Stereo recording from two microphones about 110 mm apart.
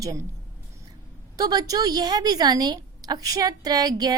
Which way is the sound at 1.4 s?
35° right (ahead or behind).